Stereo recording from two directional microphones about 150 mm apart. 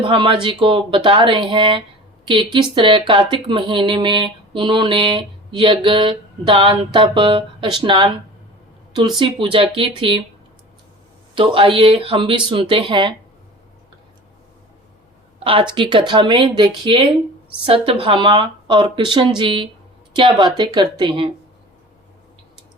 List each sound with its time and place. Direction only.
0.0 s speech: 35° right (ahead or behind)
11.3 s speech: 35° right (ahead or behind)
15.4 s speech: 35° right (ahead or behind)
18.0 s speech: 35° right (ahead or behind)